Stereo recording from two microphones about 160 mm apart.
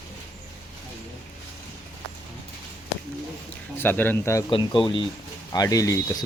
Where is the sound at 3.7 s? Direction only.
10° left (ahead or behind).